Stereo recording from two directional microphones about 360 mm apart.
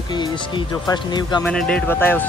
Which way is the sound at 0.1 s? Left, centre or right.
Centre.